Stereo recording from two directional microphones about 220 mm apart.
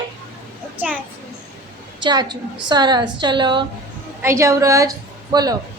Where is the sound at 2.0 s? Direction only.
20° right (ahead or behind).